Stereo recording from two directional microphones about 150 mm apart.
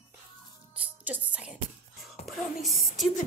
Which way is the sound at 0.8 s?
10° right (ahead or behind).